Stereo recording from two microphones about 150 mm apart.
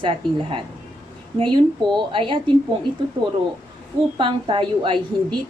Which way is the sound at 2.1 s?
35° right (ahead or behind).